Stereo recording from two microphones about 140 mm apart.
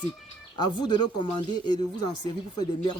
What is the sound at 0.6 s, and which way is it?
Speech, 30° left (ahead or behind).